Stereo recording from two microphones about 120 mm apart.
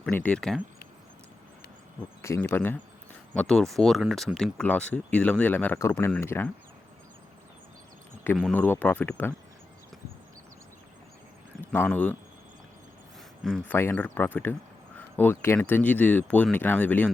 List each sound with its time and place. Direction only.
0.0 s speech: 10° left (ahead or behind)
2.2 s speech: 20° left (ahead or behind)
3.3 s speech: 5° left (ahead or behind)
8.5 s speech: 15° left (ahead or behind)
11.6 s speech: 15° left (ahead or behind)
13.7 s speech: 15° left (ahead or behind)